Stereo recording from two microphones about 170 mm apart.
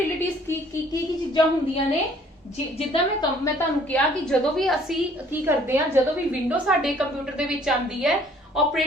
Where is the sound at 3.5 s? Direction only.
10° left (ahead or behind).